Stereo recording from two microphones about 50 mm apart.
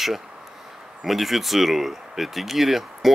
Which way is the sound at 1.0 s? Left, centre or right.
Centre.